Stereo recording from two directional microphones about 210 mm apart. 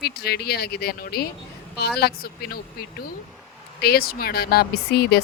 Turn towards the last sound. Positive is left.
turn(degrees=50)  # may be behind; listen again after turning